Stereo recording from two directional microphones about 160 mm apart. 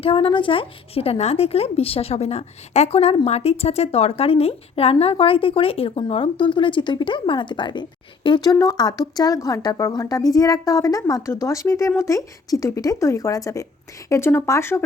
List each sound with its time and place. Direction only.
0.0 s a woman's voice: 35° left (ahead or behind); by 14.8 s 15° left (ahead or behind)